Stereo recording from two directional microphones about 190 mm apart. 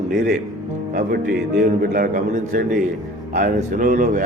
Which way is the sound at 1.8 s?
45° right (ahead or behind).